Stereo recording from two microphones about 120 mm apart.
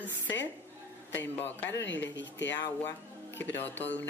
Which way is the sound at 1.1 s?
15° left (ahead or behind).